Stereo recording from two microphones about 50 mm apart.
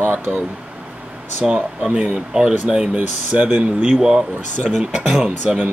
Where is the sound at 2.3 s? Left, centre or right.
Centre.